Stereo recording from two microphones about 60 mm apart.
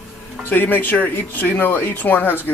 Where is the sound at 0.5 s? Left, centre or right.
Left.